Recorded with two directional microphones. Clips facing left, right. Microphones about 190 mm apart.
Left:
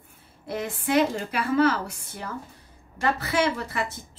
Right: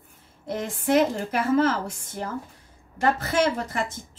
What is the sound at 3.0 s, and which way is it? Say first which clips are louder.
Speech: right 2 dB; 45° right (ahead or behind).